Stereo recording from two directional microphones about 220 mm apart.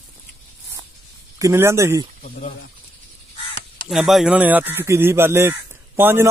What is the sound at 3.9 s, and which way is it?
Speech, centre (ahead or behind).